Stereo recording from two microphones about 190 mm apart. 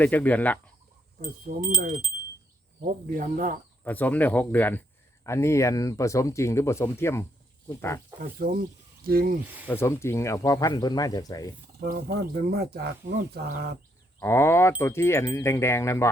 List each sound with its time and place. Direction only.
0.0 s speech: 10° left (ahead or behind)
1.5 s speech: 45° right (ahead or behind)
3.8 s speech: 10° left (ahead or behind)
8.4 s speech: 55° right (ahead or behind)
9.6 s speech: 15° left (ahead or behind)
11.8 s speech: 55° right (ahead or behind)
14.2 s speech: 15° left (ahead or behind)